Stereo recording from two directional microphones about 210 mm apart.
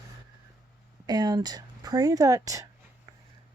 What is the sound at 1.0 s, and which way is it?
Speech, 20° right (ahead or behind).